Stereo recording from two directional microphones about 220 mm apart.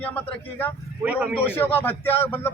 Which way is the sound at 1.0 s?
5° right (ahead or behind).